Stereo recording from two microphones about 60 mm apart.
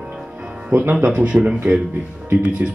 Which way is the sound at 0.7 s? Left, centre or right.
Right.